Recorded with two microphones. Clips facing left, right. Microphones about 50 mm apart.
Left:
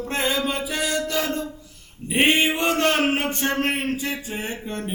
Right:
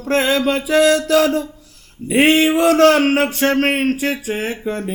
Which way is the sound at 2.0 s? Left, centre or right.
Right.